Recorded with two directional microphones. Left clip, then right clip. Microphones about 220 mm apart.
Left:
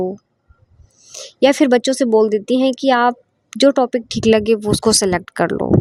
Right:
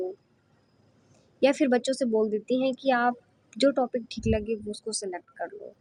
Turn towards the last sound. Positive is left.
turn(degrees=45)  # may be behind; listen again after turning